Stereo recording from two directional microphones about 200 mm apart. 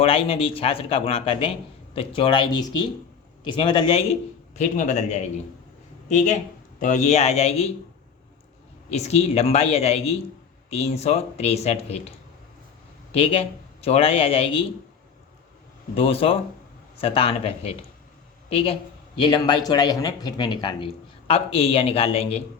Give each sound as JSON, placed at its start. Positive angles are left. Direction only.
{"t": 0.0, "sound": "speech", "side_deg": 30}
{"t": 3.6, "sound": "speech", "side_deg": 30}
{"t": 8.9, "sound": "speech", "side_deg": 35}
{"t": 16.0, "sound": "speech", "side_deg": 30}